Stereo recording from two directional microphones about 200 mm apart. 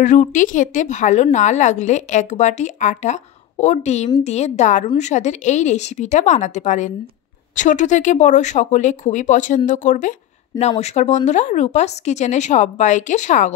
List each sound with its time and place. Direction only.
0.0 s a woman's voice: 40° left (ahead or behind)